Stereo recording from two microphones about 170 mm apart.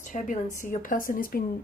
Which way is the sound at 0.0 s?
50° left (ahead or behind).